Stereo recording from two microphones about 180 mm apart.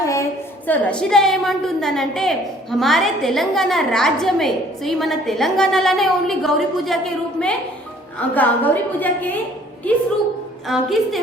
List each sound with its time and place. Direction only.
0.0 s a sound: 20° left (ahead or behind)
0.7 s a woman's voice: 5° left (ahead or behind)
10.7 s a woman's voice: centre (ahead or behind)